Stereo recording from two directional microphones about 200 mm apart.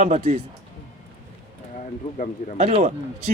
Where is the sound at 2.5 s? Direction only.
35° right (ahead or behind).